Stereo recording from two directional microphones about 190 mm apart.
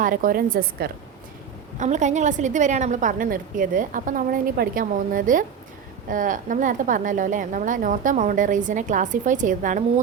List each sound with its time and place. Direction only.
0.0 s a woman's voice: 45° right (ahead or behind)
1.8 s a woman's voice: 40° right (ahead or behind)